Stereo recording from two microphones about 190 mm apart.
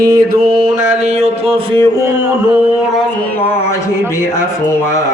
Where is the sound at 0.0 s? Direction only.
55° right (ahead or behind); by 1.3 s 35° right (ahead or behind).